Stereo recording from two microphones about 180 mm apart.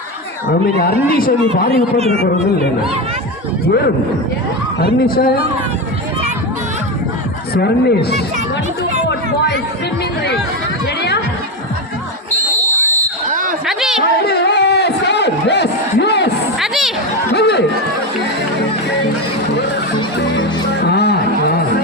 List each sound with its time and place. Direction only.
0.8 s speech: 55° left (ahead or behind)
1.7 s speech: 35° right (ahead or behind)
4.8 s speech: 55° left (ahead or behind)
7.5 s speech: 65° left (ahead or behind)
12.7 s fire alarm: 10° left (ahead or behind)
13.3 s basketball bounce: 50° right (ahead or behind)
13.7 s a sound: centre (ahead or behind)
14.0 s crowd: 60° left (ahead or behind)
16.6 s a sound: centre (ahead or behind)
17.3 s run: 65° left (ahead or behind)
20.8 s a sound: 65° left (ahead or behind)